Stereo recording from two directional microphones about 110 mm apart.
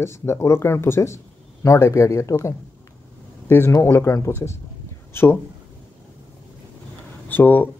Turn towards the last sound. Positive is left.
turn(degrees=15)  # may be behind; listen again after turning